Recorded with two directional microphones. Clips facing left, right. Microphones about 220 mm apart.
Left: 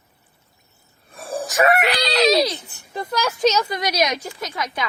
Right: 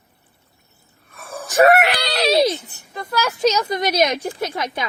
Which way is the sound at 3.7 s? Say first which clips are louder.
Right 3 dB; 25° right (ahead or behind).